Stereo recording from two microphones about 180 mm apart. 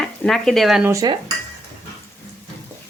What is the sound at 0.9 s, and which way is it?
Stir, 20° right (ahead or behind).